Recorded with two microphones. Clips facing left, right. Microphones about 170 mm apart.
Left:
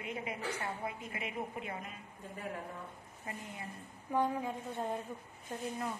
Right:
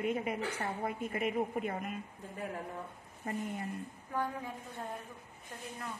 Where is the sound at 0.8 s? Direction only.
50° right (ahead or behind).